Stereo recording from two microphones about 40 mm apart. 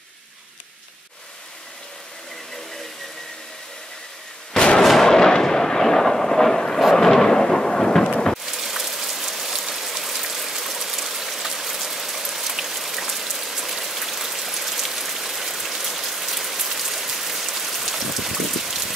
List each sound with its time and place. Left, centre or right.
4.6 s artillery fire: centre
6.8 s thunder: centre
8.5 s rain: centre